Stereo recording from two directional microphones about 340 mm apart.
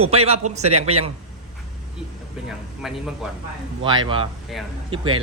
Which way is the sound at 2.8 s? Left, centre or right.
Centre.